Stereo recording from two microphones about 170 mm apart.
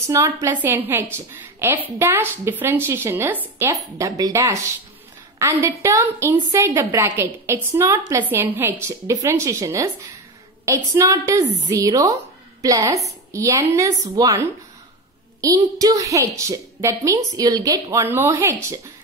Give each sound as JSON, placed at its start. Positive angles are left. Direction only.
{"t": 0.0, "sound": "a woman's voice", "side_deg": -15}